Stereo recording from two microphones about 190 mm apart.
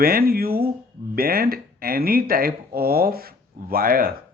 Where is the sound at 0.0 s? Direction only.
50° right (ahead or behind).